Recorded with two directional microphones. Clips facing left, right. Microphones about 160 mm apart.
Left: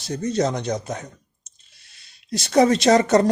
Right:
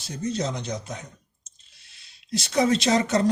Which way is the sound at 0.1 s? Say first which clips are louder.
Left 6 dB; 75° left (ahead or behind).